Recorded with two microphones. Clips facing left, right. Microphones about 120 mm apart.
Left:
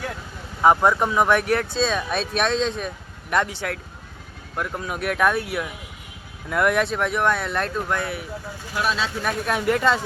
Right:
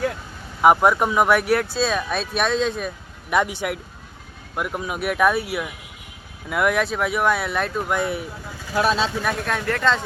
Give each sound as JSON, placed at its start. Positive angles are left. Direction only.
{"t": 0.6, "sound": "speech", "side_deg": -10}
{"t": 8.7, "sound": "speech", "side_deg": -35}
{"t": 9.2, "sound": "speech", "side_deg": 10}